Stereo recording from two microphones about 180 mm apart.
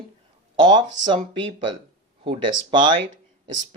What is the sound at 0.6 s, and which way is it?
Speech, 25° right (ahead or behind).